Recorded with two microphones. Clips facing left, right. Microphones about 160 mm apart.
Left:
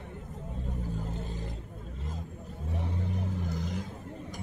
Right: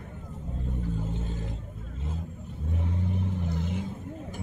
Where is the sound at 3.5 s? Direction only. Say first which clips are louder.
Right 3 dB; 40° left (ahead or behind).